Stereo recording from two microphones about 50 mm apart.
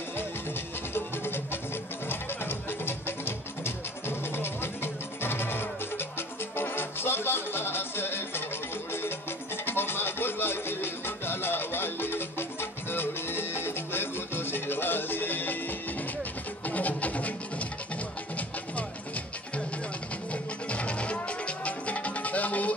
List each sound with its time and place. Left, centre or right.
0.9 s music: left
9.7 s music: left
16.6 s music: left
20.6 s music: left